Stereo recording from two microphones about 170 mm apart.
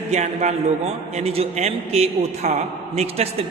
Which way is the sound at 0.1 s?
40° right (ahead or behind).